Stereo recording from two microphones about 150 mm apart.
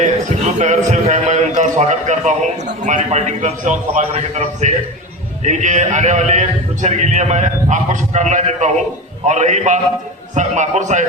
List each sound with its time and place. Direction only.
0.0 s a man's voice: 50° right (ahead or behind)